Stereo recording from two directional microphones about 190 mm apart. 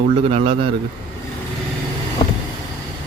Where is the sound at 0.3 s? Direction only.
30° right (ahead or behind).